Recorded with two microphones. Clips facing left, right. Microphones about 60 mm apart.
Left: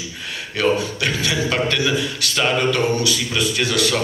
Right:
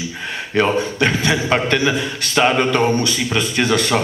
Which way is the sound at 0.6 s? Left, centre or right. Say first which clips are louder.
Right 3 dB; right.